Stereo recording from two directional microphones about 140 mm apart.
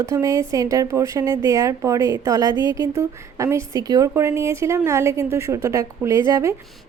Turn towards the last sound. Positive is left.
turn(degrees=-25)  # may be behind; listen again after turning